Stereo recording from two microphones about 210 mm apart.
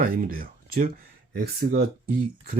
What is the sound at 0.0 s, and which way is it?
Speech, 45° right (ahead or behind).